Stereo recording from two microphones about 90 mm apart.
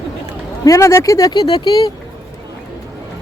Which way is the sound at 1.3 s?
50° left (ahead or behind).